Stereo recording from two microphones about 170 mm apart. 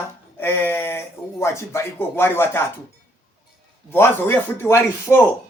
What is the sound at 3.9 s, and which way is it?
Speech, 15° left (ahead or behind).